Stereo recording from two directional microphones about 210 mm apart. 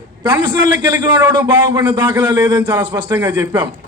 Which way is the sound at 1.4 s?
10° right (ahead or behind).